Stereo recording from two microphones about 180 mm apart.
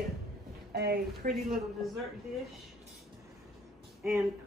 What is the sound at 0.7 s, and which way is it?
Speech, 65° right (ahead or behind).